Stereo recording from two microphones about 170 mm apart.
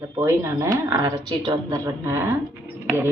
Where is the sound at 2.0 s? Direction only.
15° right (ahead or behind).